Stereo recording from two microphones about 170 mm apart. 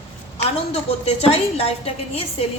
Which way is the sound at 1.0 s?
35° left (ahead or behind).